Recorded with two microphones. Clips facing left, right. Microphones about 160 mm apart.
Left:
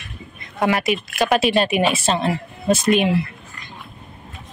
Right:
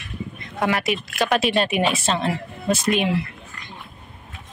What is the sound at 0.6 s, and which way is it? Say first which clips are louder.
A woman's voice: left 3 dB; 5° left (ahead or behind).